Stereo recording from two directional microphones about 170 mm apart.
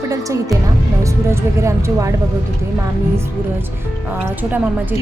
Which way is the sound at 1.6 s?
15° right (ahead or behind).